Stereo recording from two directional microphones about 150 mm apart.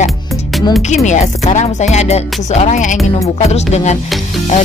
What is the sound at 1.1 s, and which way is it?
Speech, 50° left (ahead or behind).